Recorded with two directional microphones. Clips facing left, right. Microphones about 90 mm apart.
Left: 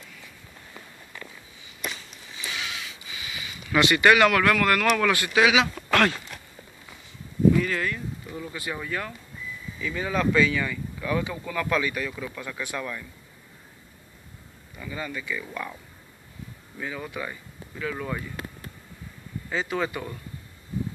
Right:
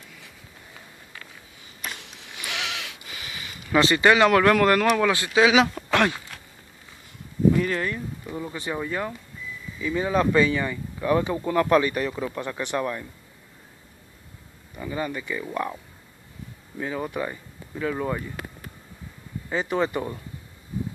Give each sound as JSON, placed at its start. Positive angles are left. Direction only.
{"t": 2.0, "sound": "a sound", "side_deg": -75}
{"t": 3.1, "sound": "a sound", "side_deg": -50}
{"t": 3.7, "sound": "speech", "side_deg": -30}
{"t": 7.5, "sound": "speech", "side_deg": -30}
{"t": 14.8, "sound": "speech", "side_deg": -25}
{"t": 16.8, "sound": "speech", "side_deg": -30}
{"t": 19.5, "sound": "speech", "side_deg": -25}